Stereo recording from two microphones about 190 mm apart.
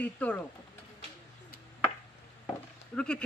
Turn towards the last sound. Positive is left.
turn(degrees=5)  # may be behind; listen again after turning